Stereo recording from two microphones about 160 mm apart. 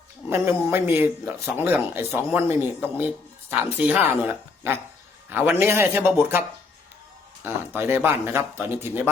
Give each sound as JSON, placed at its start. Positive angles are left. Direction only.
{"t": 0.3, "sound": "speech", "side_deg": -15}
{"t": 7.4, "sound": "speech", "side_deg": -15}